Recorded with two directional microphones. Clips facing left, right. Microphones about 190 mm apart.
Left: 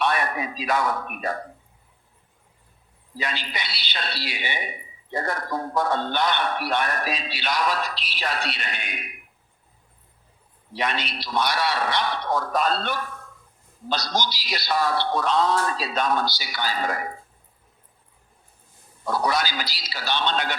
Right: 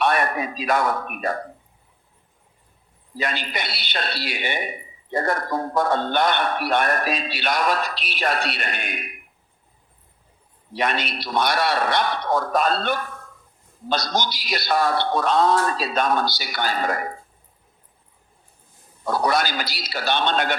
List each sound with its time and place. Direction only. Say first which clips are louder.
0.0 s speech: right 3 dB; 50° right (ahead or behind)
3.2 s speech: right 4 dB; 50° right (ahead or behind)
10.8 s speech: right 3 dB; 50° right (ahead or behind)
19.0 s speech: right 3 dB; 50° right (ahead or behind)